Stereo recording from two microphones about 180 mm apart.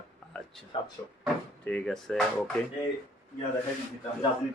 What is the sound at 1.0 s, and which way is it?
Speech, 10° left (ahead or behind).